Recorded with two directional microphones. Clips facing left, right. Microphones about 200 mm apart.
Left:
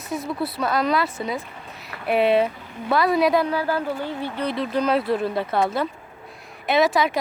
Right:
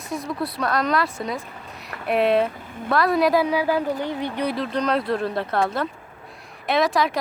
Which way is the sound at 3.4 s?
15° right (ahead or behind).